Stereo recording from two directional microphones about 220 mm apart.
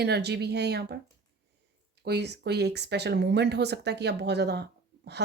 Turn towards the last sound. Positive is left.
turn(degrees=-50)  # may be behind; listen again after turning